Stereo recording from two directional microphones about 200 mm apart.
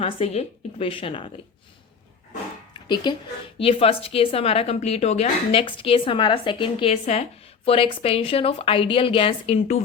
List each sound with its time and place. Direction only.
0.0 s a woman's voice: 30° left (ahead or behind)
2.7 s music: 20° left (ahead or behind)
3.6 s a woman's voice: 25° left (ahead or behind)